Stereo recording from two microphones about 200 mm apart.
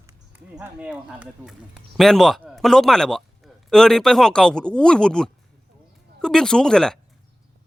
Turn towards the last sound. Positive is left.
turn(degrees=5)  # may be behind; listen again after turning